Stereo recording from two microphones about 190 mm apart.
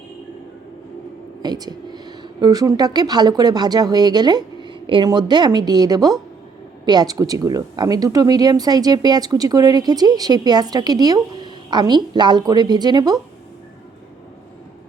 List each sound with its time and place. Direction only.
1.4 s speech: 20° right (ahead or behind)